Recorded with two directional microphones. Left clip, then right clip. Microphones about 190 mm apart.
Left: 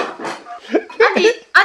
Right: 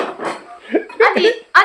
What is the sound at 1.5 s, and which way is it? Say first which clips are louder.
Speech: right 1 dB; 10° right (ahead or behind).